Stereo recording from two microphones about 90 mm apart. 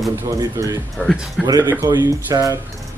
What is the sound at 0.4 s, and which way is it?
Speech, 45° right (ahead or behind).